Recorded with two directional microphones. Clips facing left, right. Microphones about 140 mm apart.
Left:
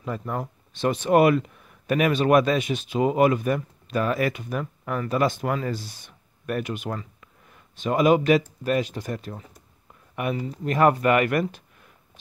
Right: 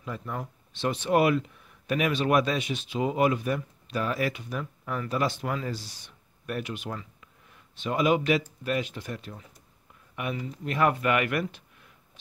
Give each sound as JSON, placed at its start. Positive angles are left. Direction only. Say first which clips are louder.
{"t": 0.0, "sound": "speech", "louder": "left 5 dB", "side_deg": 50}